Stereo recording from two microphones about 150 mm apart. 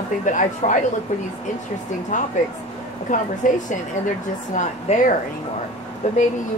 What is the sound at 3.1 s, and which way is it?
Speech, 60° left (ahead or behind).